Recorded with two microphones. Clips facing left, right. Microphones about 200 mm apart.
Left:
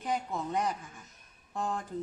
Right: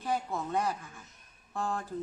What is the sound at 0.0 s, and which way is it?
Speech, 15° left (ahead or behind).